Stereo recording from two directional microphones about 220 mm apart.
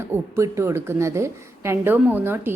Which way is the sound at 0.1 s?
15° right (ahead or behind).